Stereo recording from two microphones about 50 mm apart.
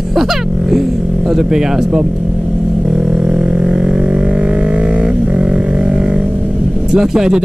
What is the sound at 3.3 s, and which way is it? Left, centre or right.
Music, centre.